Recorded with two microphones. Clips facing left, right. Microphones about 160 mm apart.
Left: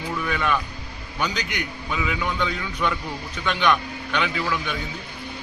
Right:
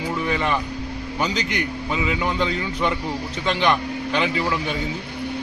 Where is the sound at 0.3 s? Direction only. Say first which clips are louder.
Right 1 dB; 30° right (ahead or behind).